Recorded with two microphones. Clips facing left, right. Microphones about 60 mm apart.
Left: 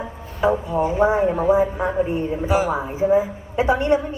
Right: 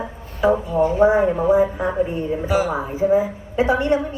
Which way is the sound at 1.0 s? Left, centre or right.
Right.